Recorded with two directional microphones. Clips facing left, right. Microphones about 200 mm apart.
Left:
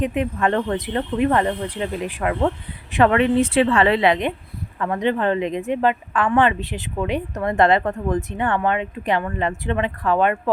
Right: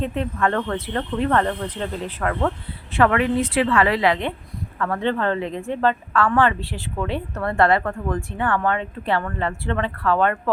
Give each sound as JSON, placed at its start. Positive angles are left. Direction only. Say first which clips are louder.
{"t": 0.0, "sound": "a woman's voice", "louder": "left 2 dB", "side_deg": 15}